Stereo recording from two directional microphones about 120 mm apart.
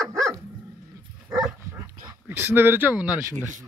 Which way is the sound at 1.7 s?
20° right (ahead or behind).